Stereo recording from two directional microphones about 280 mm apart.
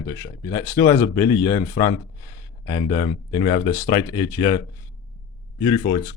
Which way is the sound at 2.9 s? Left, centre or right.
Centre.